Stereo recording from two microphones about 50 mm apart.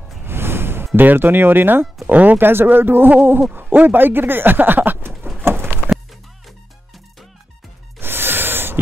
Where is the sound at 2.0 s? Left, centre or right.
Right.